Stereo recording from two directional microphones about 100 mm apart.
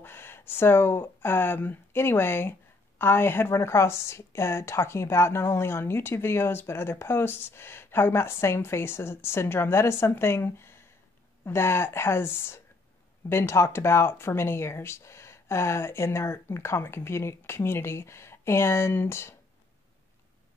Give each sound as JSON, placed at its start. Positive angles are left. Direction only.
{"t": 0.0, "sound": "a woman's voice", "side_deg": 25}